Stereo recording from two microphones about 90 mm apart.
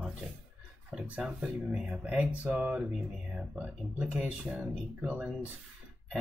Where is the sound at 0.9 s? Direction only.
10° right (ahead or behind).